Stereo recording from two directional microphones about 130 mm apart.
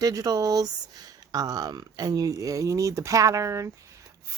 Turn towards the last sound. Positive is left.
turn(degrees=-25)  # may be behind; listen again after turning